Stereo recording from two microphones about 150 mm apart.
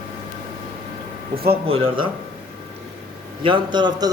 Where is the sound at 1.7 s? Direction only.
40° right (ahead or behind).